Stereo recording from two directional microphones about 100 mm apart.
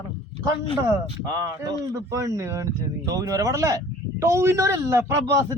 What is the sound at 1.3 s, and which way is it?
Speech, 35° right (ahead or behind).